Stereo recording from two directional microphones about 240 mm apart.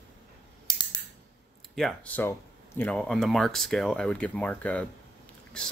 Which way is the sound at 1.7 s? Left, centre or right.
Centre.